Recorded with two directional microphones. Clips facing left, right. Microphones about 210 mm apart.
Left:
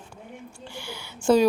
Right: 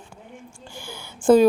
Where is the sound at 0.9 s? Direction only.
50° right (ahead or behind).